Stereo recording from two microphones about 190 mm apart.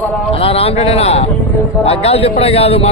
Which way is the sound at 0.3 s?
30° left (ahead or behind).